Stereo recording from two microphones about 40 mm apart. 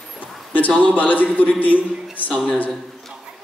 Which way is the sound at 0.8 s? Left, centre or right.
Left.